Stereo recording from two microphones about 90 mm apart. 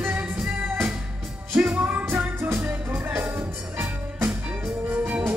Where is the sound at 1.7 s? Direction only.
20° right (ahead or behind).